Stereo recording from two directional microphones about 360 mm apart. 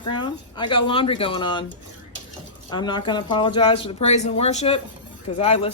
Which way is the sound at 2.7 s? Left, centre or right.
Centre.